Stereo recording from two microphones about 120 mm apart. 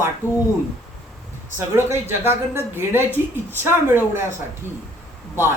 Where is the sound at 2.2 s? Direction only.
20° right (ahead or behind).